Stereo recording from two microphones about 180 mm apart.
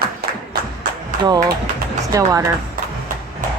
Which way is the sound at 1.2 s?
20° right (ahead or behind).